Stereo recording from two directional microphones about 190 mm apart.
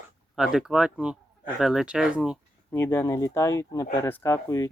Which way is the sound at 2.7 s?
10° left (ahead or behind).